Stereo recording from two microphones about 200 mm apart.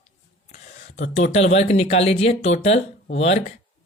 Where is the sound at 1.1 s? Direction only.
35° left (ahead or behind).